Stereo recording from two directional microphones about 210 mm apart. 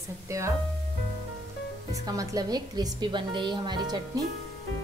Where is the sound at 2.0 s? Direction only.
20° right (ahead or behind).